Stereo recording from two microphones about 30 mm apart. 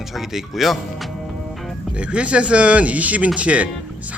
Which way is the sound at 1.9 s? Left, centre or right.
Right.